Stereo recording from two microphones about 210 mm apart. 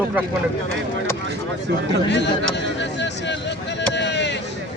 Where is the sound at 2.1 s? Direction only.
55° left (ahead or behind).